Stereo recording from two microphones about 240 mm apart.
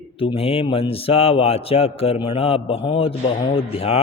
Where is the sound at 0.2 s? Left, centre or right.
Left.